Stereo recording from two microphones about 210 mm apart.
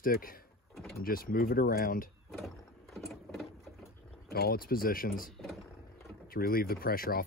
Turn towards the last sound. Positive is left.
turn(degrees=45)  # may be behind; listen again after turning